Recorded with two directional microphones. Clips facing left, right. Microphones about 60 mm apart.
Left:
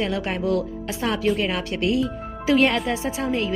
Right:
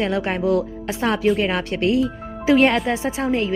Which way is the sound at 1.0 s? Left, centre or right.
Right.